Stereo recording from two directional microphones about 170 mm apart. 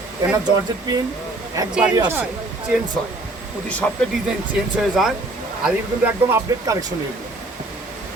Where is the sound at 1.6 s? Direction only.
20° right (ahead or behind).